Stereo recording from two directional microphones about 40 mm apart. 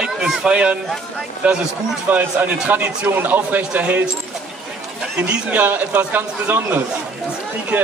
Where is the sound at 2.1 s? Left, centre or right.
Right.